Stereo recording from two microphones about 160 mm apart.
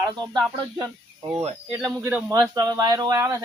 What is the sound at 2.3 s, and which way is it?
Speech, 20° right (ahead or behind).